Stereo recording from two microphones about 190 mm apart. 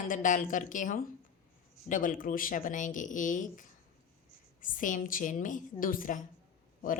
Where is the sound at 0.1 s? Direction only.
45° left (ahead or behind).